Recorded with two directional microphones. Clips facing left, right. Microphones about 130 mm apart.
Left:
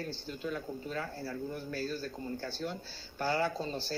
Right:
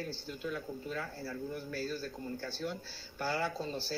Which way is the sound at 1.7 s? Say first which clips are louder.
Left 2 dB; 5° right (ahead or behind).